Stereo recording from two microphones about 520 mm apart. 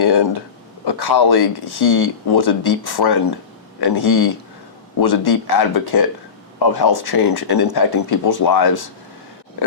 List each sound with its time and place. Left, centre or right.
0.0 s speech: left